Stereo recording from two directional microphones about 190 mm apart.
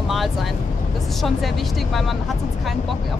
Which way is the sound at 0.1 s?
Centre (ahead or behind).